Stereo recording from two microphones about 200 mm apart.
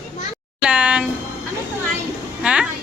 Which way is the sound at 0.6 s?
5° right (ahead or behind).